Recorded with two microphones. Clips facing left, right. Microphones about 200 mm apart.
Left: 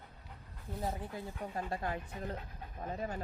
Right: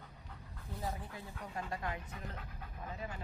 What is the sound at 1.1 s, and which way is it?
Speech, 35° left (ahead or behind).